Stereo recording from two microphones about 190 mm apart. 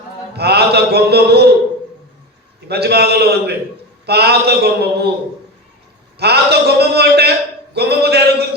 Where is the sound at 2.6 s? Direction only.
60° right (ahead or behind).